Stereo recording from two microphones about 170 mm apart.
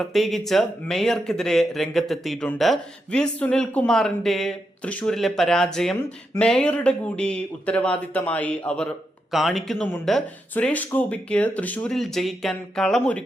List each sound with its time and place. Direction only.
0.0 s speech: centre (ahead or behind)